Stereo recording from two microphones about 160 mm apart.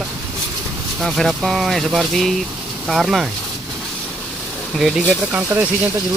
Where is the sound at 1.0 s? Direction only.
Centre (ahead or behind).